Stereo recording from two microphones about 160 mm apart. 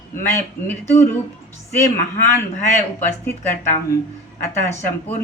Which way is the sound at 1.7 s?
15° left (ahead or behind).